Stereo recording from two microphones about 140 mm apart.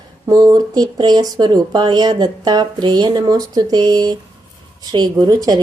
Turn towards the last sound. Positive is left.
turn(degrees=-25)  # may be behind; listen again after turning